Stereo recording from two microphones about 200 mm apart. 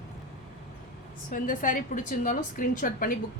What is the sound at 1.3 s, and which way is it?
A woman's voice, 40° left (ahead or behind).